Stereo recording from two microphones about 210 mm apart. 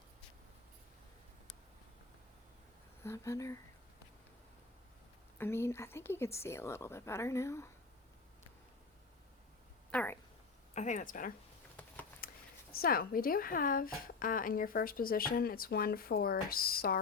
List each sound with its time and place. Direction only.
3.0 s speech: 10° left (ahead or behind)
5.4 s speech: 10° left (ahead or behind)
9.9 s speech: 5° left (ahead or behind)
10.8 s speech: 35° left (ahead or behind)
12.2 s a sound: 45° left (ahead or behind)
12.7 s a woman's voice: 45° left (ahead or behind)